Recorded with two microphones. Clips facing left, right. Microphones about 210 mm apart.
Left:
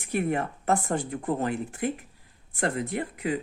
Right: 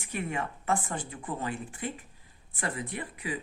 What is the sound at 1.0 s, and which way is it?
A woman's voice, 65° left (ahead or behind).